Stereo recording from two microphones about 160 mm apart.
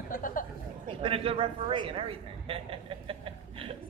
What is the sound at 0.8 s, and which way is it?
A man's voice, 35° right (ahead or behind).